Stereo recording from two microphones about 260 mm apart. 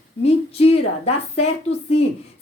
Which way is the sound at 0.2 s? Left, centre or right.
Left.